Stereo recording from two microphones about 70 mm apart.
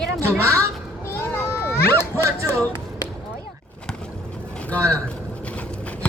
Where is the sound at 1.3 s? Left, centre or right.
Left.